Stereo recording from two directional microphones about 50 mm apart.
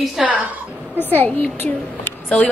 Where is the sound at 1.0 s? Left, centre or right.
Left.